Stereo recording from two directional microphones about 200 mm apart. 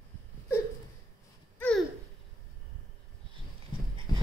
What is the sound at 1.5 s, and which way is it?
Babbling, 5° left (ahead or behind).